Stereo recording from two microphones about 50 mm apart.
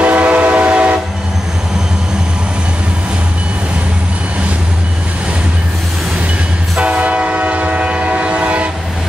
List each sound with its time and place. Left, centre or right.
0.0 s train: right
6.8 s train: right